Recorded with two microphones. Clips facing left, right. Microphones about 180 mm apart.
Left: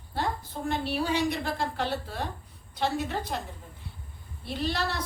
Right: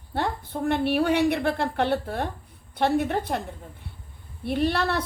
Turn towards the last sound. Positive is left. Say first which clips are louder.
# right 7 dB
turn(degrees=-60)  # may be behind; listen again after turning